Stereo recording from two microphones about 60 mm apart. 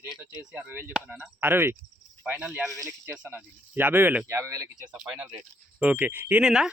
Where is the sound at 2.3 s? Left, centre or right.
Right.